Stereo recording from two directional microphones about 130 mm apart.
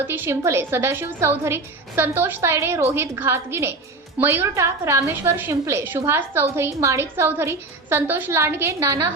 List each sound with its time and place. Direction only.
0.0 s a woman's voice: 15° right (ahead or behind)